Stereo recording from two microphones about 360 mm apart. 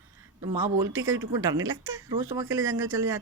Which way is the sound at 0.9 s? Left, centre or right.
Right.